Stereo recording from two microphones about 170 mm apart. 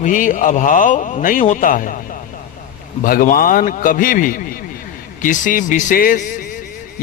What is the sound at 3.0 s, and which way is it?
A man's voice, 55° left (ahead or behind).